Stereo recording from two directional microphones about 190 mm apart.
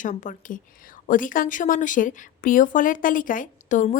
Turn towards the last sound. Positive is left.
turn(degrees=40)  # may be behind; listen again after turning